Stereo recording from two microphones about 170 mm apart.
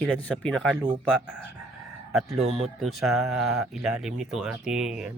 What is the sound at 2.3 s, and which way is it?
Speech, centre (ahead or behind).